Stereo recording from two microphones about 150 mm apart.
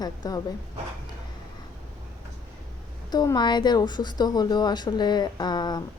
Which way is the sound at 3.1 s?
25° left (ahead or behind).